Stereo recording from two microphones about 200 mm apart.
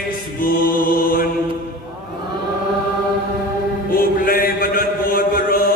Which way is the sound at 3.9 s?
45° left (ahead or behind).